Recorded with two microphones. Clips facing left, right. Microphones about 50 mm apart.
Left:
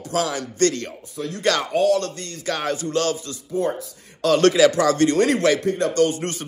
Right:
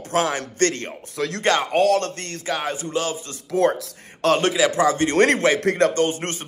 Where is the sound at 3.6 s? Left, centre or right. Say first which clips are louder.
Right 4 dB; right.